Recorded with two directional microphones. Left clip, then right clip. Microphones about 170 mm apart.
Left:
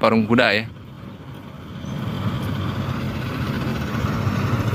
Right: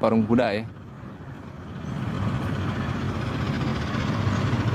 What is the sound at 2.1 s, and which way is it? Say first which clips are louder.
Vehicle: left 1 dB; 55° left (ahead or behind).